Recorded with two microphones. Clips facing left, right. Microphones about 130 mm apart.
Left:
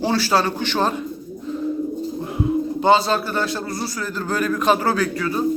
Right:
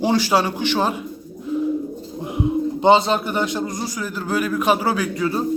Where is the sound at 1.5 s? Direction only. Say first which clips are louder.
Right 5 dB; 10° right (ahead or behind).